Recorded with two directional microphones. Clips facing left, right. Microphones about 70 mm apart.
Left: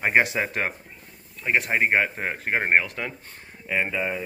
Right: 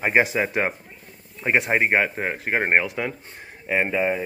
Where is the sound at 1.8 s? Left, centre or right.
Centre.